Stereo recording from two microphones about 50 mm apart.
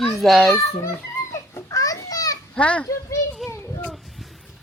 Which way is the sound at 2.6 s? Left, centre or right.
Left.